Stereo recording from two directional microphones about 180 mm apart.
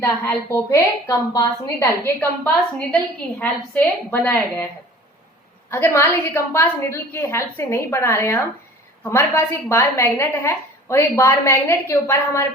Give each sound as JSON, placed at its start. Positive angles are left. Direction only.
{"t": 0.0, "sound": "a woman's voice", "side_deg": 15}
{"t": 5.7, "sound": "a woman's voice", "side_deg": 15}